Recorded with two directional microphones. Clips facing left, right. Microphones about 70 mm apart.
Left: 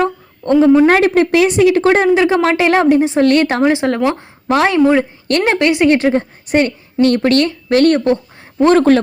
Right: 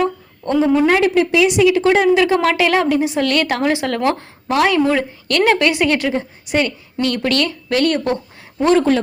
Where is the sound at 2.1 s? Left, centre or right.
Left.